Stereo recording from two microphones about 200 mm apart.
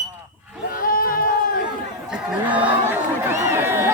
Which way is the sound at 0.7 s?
45° left (ahead or behind).